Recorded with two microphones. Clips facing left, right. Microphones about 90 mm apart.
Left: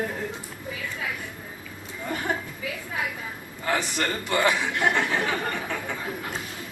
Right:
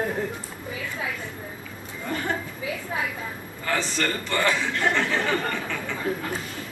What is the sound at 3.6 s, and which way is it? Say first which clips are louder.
A man's voice: even; 15° left (ahead or behind).